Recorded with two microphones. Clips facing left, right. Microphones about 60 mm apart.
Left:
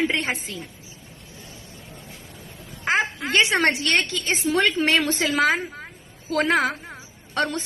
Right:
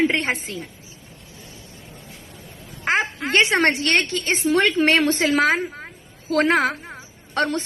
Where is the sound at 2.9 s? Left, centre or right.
Right.